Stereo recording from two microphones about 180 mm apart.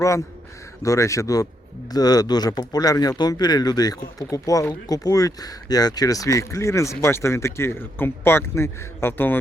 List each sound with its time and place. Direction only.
0.8 s speech: 15° left (ahead or behind)